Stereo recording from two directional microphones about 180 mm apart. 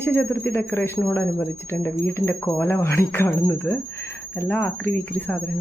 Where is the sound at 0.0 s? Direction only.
10° left (ahead or behind).